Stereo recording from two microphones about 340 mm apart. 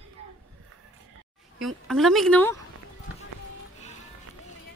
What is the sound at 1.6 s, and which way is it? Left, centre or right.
Speech, centre.